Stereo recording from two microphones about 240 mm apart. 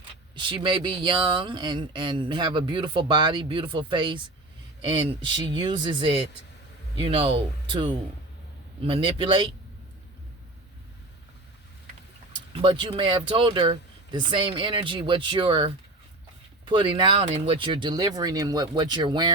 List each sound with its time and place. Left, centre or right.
0.3 s speech: centre
12.8 s speech: centre